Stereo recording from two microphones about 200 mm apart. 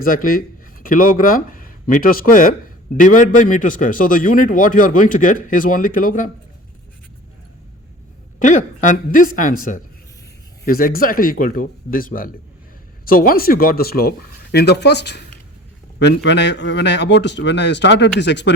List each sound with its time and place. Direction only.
0.0 s a man's voice: 45° left (ahead or behind)
8.4 s a man's voice: 40° left (ahead or behind); by 18.5 s 60° left (ahead or behind)